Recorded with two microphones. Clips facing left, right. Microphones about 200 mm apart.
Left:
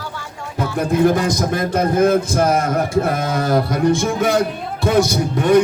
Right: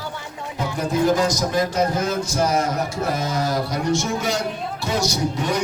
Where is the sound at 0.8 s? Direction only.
55° left (ahead or behind).